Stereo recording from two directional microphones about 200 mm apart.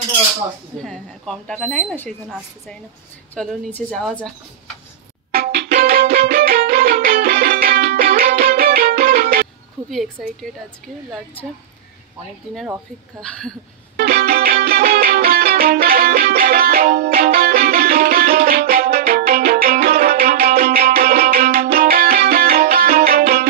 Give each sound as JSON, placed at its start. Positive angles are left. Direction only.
{"t": 0.8, "sound": "speech", "side_deg": 0}
{"t": 5.3, "sound": "music", "side_deg": -55}
{"t": 9.8, "sound": "speech", "side_deg": 0}
{"t": 12.5, "sound": "a woman's voice", "side_deg": -10}
{"t": 13.2, "sound": "speech", "side_deg": 5}
{"t": 13.9, "sound": "music", "side_deg": -50}